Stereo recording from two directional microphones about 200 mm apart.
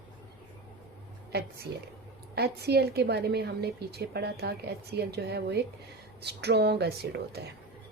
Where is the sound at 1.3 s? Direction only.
50° right (ahead or behind).